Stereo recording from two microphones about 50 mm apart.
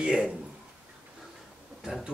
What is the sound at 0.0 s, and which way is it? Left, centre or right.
Speech, centre.